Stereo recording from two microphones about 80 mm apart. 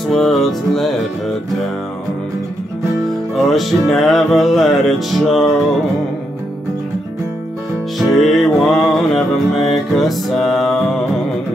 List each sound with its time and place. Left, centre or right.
0.1 s music: centre
3.4 s music: centre
8.0 s music: centre